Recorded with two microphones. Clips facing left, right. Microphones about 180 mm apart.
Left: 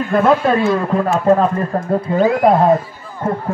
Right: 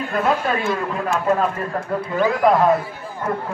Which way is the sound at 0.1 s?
45° left (ahead or behind).